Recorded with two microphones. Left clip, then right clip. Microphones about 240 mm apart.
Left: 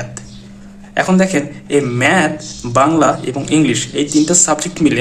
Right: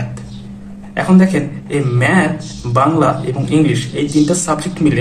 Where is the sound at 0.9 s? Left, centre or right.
Left.